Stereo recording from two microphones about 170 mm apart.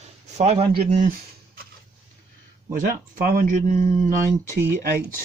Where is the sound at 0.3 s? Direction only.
40° right (ahead or behind).